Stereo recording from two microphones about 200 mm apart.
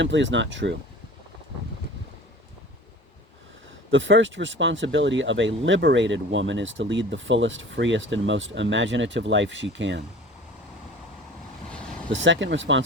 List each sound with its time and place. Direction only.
0.0 s speech: 65° right (ahead or behind)
3.9 s speech: 70° right (ahead or behind)
12.1 s speech: 70° right (ahead or behind)